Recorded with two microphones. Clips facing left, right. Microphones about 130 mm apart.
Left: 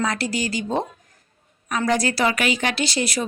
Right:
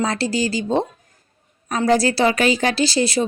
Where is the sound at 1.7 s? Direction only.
30° right (ahead or behind).